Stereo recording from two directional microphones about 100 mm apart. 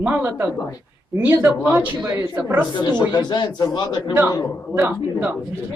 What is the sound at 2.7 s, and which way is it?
A man's voice, 50° left (ahead or behind).